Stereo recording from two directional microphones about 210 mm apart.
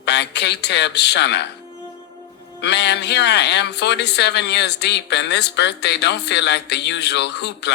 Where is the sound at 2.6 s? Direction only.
55° left (ahead or behind).